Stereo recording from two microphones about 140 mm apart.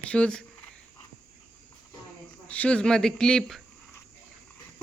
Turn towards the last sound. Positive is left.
turn(degrees=5)  # may be behind; listen again after turning